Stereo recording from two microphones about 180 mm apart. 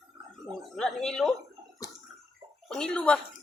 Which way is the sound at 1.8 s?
20° left (ahead or behind).